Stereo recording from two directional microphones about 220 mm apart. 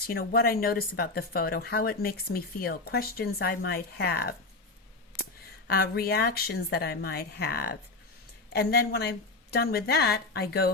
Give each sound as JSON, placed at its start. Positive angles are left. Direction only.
{"t": 0.1, "sound": "speech", "side_deg": 45}
{"t": 5.1, "sound": "a sound", "side_deg": -20}
{"t": 5.6, "sound": "speech", "side_deg": 45}